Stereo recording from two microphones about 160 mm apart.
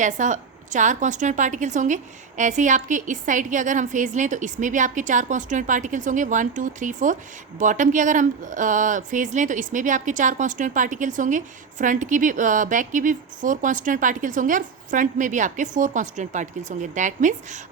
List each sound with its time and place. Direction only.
0.0 s speech: 50° right (ahead or behind)